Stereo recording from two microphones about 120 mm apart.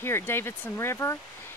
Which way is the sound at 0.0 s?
20° left (ahead or behind).